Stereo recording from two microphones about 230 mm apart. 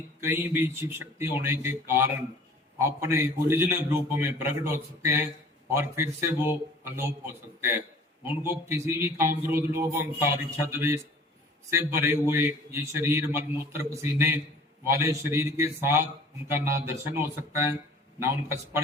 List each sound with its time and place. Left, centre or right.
0.2 s a man's voice: centre